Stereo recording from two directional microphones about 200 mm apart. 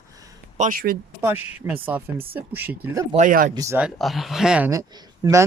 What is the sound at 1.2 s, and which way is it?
Speech, 10° right (ahead or behind).